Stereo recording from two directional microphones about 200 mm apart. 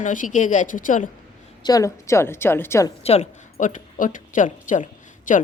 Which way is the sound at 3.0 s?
30° left (ahead or behind).